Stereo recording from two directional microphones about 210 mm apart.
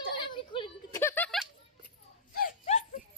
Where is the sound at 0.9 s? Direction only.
10° left (ahead or behind).